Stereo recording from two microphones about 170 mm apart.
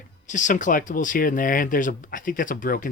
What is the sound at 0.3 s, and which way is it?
Speech, 50° left (ahead or behind).